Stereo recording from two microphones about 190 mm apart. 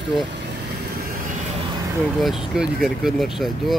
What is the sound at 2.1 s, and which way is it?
Speech, centre (ahead or behind).